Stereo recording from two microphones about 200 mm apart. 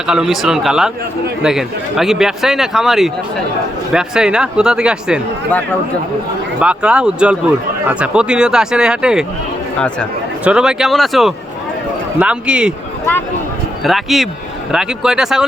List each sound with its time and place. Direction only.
0.1 s a man's voice: centre (ahead or behind)
6.6 s a man's voice: 5° right (ahead or behind)
10.4 s a man's voice: 5° right (ahead or behind)
13.8 s a man's voice: centre (ahead or behind)